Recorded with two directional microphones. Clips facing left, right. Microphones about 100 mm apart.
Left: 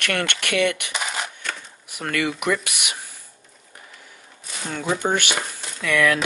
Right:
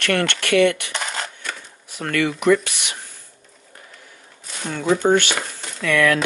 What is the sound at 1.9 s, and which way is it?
Speech, 15° left (ahead or behind).